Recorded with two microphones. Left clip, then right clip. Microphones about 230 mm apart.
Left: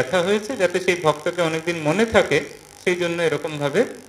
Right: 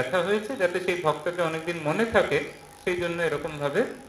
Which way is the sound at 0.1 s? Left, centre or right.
Left.